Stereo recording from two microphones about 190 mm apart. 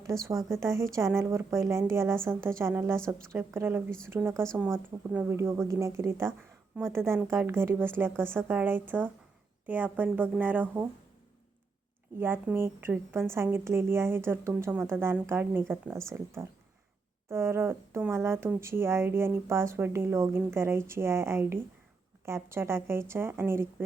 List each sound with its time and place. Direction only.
0.1 s speech: 15° right (ahead or behind)
12.2 s speech: 10° right (ahead or behind)